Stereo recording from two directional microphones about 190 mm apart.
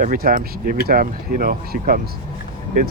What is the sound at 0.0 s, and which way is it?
Speech, 50° right (ahead or behind).